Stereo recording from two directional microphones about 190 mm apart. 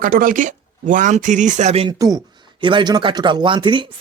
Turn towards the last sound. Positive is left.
turn(degrees=-25)  # may be behind; listen again after turning